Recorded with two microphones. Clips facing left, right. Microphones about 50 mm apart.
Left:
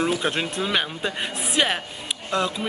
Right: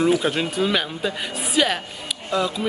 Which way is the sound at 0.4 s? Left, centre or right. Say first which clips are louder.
Right 2 dB; centre.